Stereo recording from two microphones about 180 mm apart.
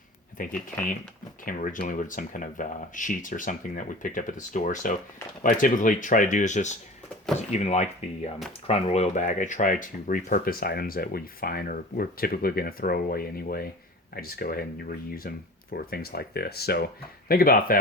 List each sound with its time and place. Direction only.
0.4 s speech: 50° left (ahead or behind)